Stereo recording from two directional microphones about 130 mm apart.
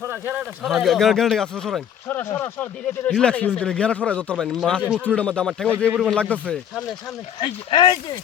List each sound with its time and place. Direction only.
0.0 s a sound: 15° right (ahead or behind)
0.6 s a man's voice: centre (ahead or behind)
7.4 s speech: 35° left (ahead or behind)